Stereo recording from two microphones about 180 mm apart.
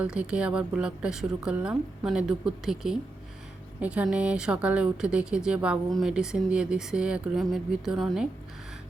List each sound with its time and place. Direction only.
0.0 s speech: 5° right (ahead or behind)